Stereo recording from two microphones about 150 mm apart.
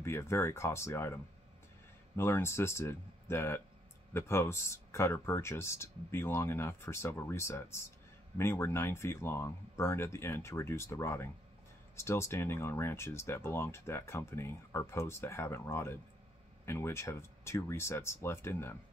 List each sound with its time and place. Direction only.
0.0 s speech: 15° left (ahead or behind)